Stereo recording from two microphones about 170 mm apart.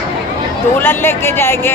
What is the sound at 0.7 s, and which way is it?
Speech, 15° left (ahead or behind).